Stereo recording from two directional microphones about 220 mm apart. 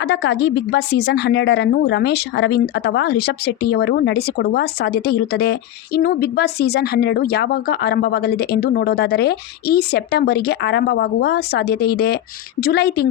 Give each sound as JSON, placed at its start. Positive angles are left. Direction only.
{"t": 0.0, "sound": "a woman's voice", "side_deg": 50}